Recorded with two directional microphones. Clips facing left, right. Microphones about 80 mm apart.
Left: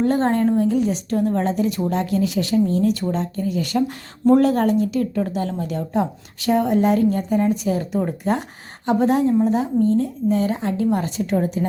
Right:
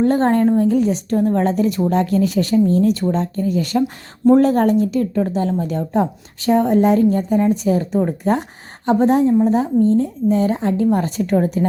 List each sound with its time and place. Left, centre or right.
0.0 s speech: right
1.5 s speech: right
11.2 s speech: right